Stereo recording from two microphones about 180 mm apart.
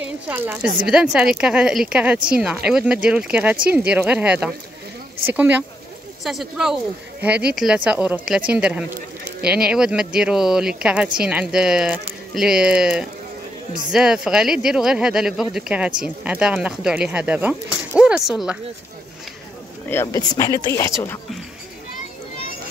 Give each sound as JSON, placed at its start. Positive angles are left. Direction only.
{"t": 0.0, "sound": "a woman's voice", "side_deg": -10}
{"t": 19.9, "sound": "speech", "side_deg": 15}